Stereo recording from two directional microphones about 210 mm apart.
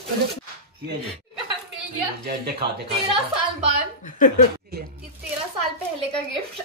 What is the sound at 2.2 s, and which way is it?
Speech, 50° right (ahead or behind).